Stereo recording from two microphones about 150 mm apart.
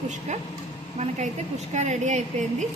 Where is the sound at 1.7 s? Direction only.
50° right (ahead or behind).